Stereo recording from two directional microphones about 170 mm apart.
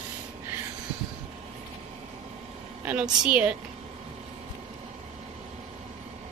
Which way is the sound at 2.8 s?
5° right (ahead or behind).